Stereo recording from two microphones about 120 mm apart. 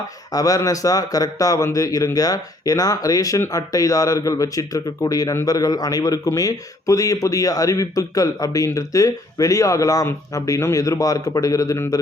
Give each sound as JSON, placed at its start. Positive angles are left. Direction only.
{"t": 0.3, "sound": "speech", "side_deg": 30}